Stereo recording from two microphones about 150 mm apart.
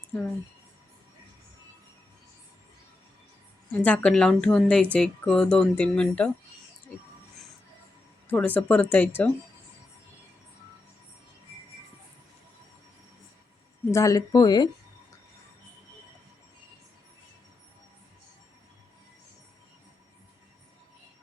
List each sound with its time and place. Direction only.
3.7 s speech: 10° left (ahead or behind)
8.3 s speech: 10° left (ahead or behind)
13.9 s speech: 20° left (ahead or behind)